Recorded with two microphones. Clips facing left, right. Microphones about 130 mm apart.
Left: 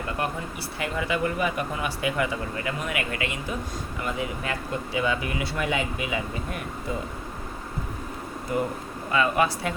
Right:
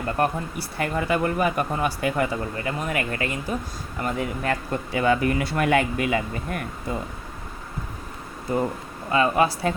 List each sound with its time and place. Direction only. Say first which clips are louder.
0.2 s speech: right 8 dB; 45° right (ahead or behind)
8.5 s speech: right 3 dB; 30° right (ahead or behind)